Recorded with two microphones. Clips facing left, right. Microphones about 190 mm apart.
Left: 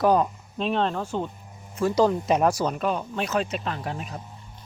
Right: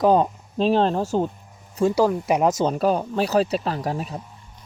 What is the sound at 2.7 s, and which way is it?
Speech, 35° right (ahead or behind).